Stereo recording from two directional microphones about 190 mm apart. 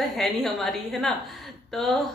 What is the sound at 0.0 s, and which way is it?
A woman's voice, centre (ahead or behind).